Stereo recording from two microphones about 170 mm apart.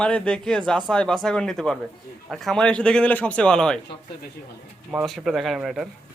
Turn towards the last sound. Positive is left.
turn(degrees=-5)  # may be behind; listen again after turning